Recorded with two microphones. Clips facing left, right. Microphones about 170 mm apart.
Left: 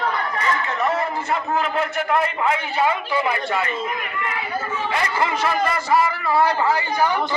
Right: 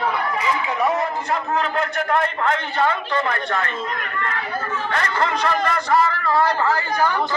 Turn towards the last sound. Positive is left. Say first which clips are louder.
# even
turn(degrees=15)  # may be behind; listen again after turning